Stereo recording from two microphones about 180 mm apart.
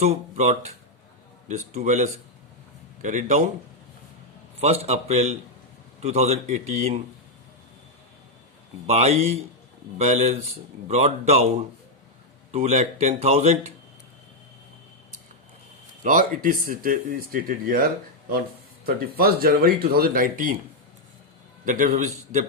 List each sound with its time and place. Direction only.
0.0 s speech: 40° right (ahead or behind)
4.6 s speech: 35° right (ahead or behind)
8.9 s speech: 35° right (ahead or behind)
12.5 s speech: 35° right (ahead or behind)
16.0 s speech: 45° right (ahead or behind)
18.9 s speech: 55° right (ahead or behind)
21.6 s speech: 45° right (ahead or behind)